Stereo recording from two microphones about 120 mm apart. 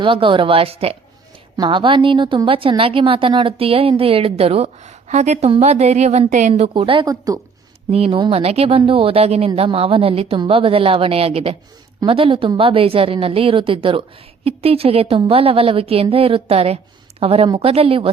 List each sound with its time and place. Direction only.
0.0 s a woman's voice: 45° right (ahead or behind)
1.5 s a woman's voice: 40° right (ahead or behind); by 5.5 s 75° right (ahead or behind)
5.5 s speech: 60° right (ahead or behind); by 6.5 s 80° right
6.7 s a woman's voice: 45° right (ahead or behind)
7.0 s a woman's voice: 35° right (ahead or behind)
7.9 s a woman's voice: 55° right (ahead or behind)